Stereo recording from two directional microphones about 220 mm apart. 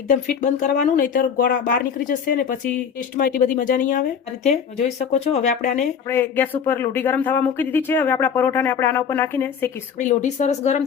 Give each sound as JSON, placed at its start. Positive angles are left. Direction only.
{"t": 0.1, "sound": "speech", "side_deg": 35}
{"t": 6.1, "sound": "speech", "side_deg": 10}
{"t": 10.0, "sound": "speech", "side_deg": 35}